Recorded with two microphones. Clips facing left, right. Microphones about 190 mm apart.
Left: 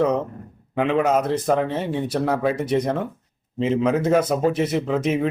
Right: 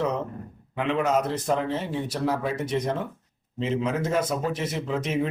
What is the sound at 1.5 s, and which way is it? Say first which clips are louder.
A man's voice: left 5 dB; 60° left (ahead or behind).